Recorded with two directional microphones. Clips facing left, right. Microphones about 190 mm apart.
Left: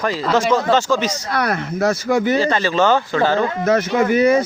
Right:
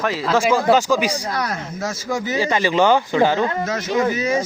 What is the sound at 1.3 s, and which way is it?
Speech, 65° left (ahead or behind).